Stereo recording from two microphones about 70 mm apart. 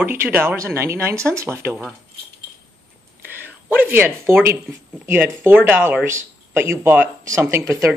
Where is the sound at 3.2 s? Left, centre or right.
Right.